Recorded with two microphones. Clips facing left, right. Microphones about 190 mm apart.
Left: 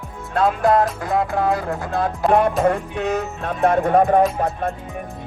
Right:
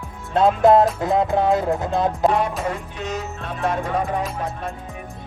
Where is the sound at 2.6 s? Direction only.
60° left (ahead or behind).